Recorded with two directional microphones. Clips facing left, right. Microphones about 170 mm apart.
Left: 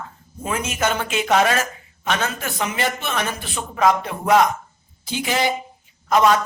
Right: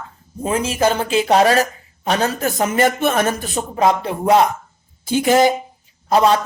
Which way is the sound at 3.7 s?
30° right (ahead or behind).